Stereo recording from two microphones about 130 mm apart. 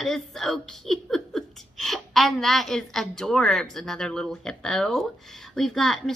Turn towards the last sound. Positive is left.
turn(degrees=0)  # may be behind; listen again after turning